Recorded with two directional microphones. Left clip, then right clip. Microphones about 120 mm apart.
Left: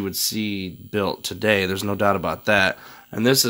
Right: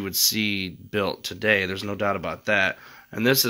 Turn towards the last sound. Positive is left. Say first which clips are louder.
# left 2 dB
turn(degrees=20)  # may be behind; listen again after turning